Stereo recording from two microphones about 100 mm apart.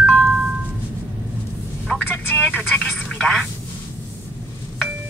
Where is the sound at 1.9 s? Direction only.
15° left (ahead or behind).